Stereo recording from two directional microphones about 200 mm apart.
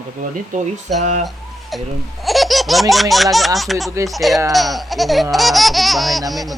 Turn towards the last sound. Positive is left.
turn(degrees=0)  # may be behind; listen again after turning